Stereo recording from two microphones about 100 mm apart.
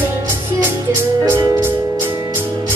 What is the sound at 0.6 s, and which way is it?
Music, 20° right (ahead or behind).